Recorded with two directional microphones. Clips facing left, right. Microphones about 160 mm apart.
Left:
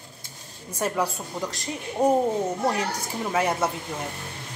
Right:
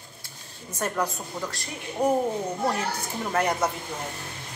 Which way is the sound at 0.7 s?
10° left (ahead or behind).